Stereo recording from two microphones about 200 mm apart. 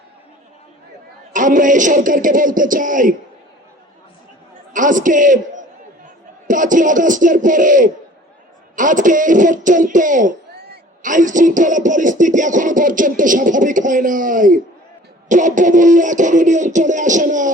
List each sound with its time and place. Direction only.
1.3 s speech: 40° right (ahead or behind)
4.7 s speech: 40° right (ahead or behind)
6.5 s speech: 40° right (ahead or behind)